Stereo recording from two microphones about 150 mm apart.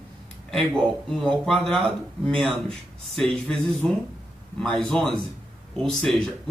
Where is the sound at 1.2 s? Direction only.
5° left (ahead or behind).